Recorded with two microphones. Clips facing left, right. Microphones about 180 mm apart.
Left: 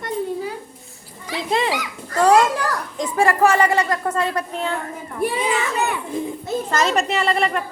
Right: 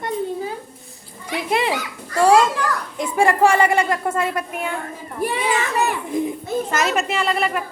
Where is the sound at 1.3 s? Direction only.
15° right (ahead or behind).